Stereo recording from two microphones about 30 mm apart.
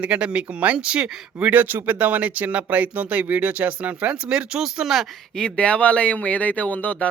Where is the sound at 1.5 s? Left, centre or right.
Right.